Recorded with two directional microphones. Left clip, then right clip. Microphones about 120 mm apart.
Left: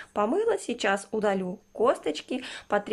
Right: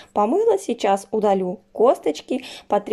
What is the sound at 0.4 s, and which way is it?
Speech, 25° right (ahead or behind).